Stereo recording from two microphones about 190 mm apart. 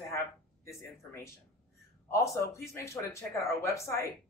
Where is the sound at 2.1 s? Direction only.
15° left (ahead or behind).